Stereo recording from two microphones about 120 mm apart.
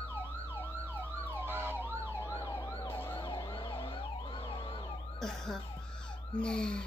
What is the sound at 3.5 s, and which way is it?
Emergency vehicle, 45° left (ahead or behind).